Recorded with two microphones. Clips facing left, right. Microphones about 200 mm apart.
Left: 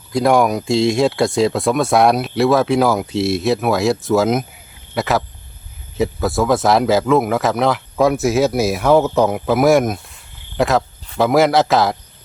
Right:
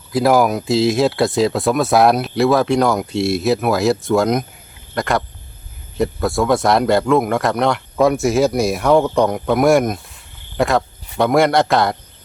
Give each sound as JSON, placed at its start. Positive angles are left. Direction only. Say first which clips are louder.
{"t": 0.1, "sound": "speech", "louder": "even", "side_deg": 0}